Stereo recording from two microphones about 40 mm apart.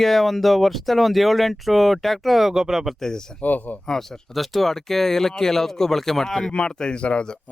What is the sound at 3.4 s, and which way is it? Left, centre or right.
Speech, left.